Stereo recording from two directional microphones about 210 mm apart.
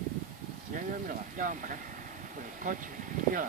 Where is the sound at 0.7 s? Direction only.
40° right (ahead or behind).